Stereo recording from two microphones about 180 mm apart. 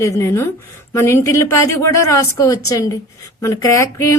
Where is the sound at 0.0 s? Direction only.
15° left (ahead or behind).